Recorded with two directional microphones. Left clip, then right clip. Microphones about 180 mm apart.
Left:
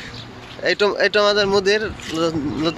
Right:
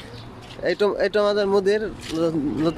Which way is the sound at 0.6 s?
15° right (ahead or behind).